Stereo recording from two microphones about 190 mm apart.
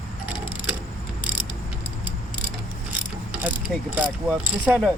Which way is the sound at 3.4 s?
10° right (ahead or behind).